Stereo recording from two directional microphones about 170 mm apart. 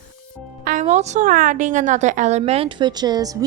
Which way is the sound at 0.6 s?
50° right (ahead or behind).